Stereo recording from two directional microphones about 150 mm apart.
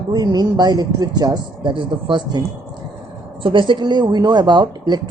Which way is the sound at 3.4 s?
35° right (ahead or behind).